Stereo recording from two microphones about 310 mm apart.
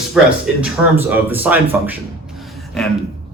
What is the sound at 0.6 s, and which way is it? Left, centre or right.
A man's voice, centre.